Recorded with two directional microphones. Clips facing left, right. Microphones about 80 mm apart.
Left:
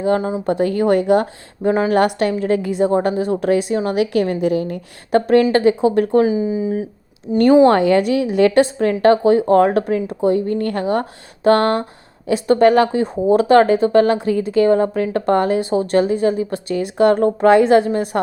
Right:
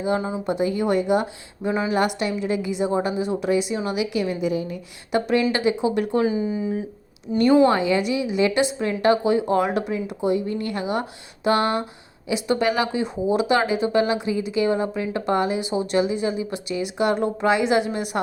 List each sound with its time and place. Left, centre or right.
0.2 s speech: left
0.4 s speech: left
5.1 s speech: left
6.2 s speech: centre
7.7 s a woman's voice: left